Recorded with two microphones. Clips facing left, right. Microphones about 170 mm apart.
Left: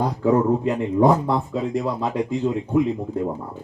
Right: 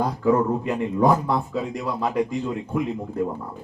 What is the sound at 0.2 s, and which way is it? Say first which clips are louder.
Speech: left 3 dB; 25° left (ahead or behind).